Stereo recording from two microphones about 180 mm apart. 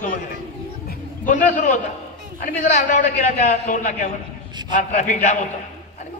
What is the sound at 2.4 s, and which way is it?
A man's voice, 45° left (ahead or behind).